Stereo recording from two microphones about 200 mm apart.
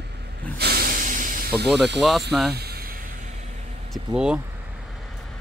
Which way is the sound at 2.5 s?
50° right (ahead or behind).